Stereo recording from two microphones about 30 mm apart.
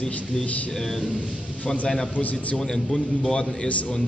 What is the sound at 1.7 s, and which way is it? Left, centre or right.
A man's voice, centre.